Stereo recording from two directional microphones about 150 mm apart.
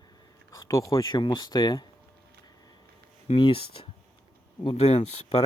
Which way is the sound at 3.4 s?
35° left (ahead or behind).